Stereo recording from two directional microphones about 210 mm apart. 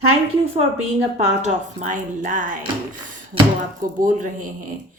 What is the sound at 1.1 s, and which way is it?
Speech, 35° right (ahead or behind).